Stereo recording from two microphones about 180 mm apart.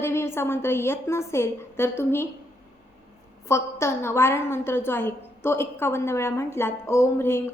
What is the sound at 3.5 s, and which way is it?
A woman's voice, 15° left (ahead or behind).